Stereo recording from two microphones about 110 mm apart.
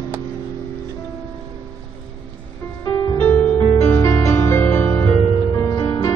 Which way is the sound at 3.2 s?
20° left (ahead or behind).